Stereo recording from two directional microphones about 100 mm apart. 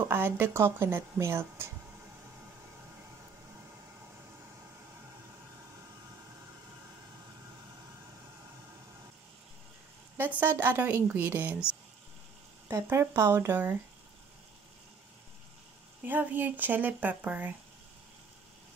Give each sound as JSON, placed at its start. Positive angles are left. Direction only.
{"t": 0.0, "sound": "speech", "side_deg": -25}
{"t": 10.4, "sound": "speech", "side_deg": -20}
{"t": 12.6, "sound": "speech", "side_deg": -30}
{"t": 16.1, "sound": "speech", "side_deg": -20}